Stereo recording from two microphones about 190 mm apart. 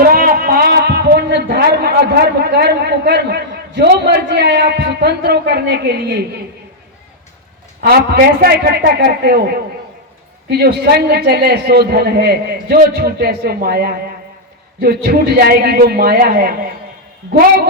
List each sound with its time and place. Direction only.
0.0 s speech: 50° right (ahead or behind)
7.8 s a man's voice: 55° right (ahead or behind)
10.5 s a man's voice: 55° right (ahead or behind)